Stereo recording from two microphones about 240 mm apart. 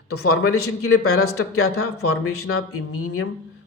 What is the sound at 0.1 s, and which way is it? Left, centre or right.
Speech, left.